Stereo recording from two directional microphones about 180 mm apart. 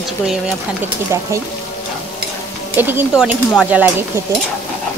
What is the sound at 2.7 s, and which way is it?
Speech, 10° right (ahead or behind).